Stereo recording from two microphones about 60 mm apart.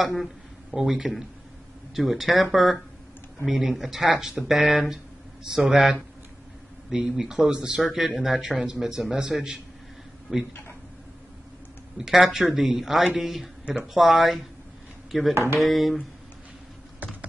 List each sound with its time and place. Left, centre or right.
0.0 s speech: centre
12.0 s speech: centre
15.3 s speech: right
15.6 s speech: centre